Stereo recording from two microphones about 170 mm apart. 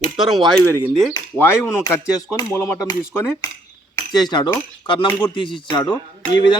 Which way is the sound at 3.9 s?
25° left (ahead or behind).